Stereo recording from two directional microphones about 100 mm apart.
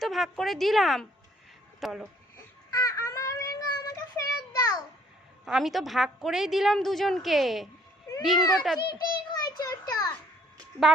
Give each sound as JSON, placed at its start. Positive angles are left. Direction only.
{"t": 0.0, "sound": "a woman's voice", "side_deg": 0}
{"t": 2.6, "sound": "child singing", "side_deg": 35}
{"t": 5.5, "sound": "a woman's voice", "side_deg": 0}
{"t": 8.4, "sound": "a child's voice", "side_deg": 45}
{"t": 8.9, "sound": "a sound", "side_deg": 45}
{"t": 10.9, "sound": "a woman's voice", "side_deg": -5}